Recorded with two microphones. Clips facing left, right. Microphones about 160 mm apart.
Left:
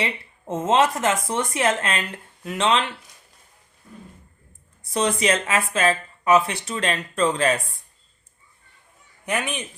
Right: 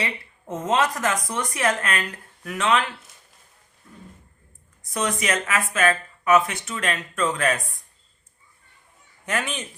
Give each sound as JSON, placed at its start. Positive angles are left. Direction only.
{"t": 0.0, "sound": "speech", "side_deg": 25}
{"t": 4.8, "sound": "speech", "side_deg": 30}
{"t": 9.2, "sound": "a man's voice", "side_deg": 20}